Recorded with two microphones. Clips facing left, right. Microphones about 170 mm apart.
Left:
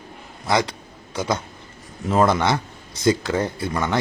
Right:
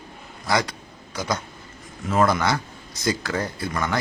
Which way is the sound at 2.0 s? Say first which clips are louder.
Left 2 dB; 25° left (ahead or behind).